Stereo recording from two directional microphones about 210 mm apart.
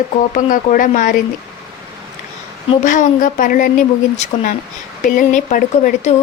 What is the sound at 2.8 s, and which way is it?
Speech, 35° left (ahead or behind).